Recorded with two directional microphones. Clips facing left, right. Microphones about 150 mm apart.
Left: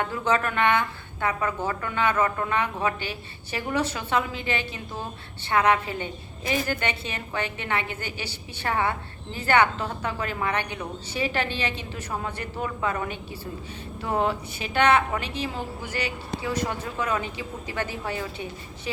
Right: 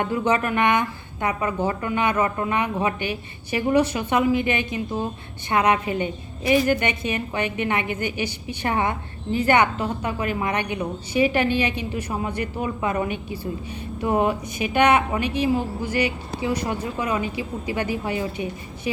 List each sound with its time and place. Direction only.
0.0 s a woman's voice: 15° right (ahead or behind)